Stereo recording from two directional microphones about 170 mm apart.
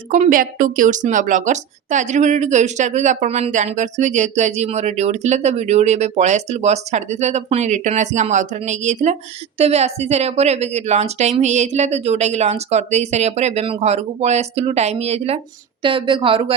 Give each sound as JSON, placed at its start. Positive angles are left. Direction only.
{"t": 0.1, "sound": "a woman's voice", "side_deg": -50}